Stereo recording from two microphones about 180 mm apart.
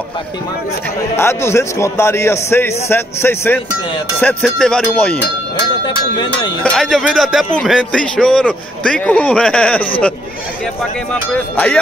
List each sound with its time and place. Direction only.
1.1 s a man's voice: 15° left (ahead or behind)
5.9 s speech: 25° left (ahead or behind)
6.6 s a man's voice: 5° left (ahead or behind)
11.3 s a man's voice: 5° left (ahead or behind)